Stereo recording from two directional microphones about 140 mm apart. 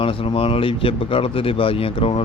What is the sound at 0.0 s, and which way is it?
Speech, 40° left (ahead or behind).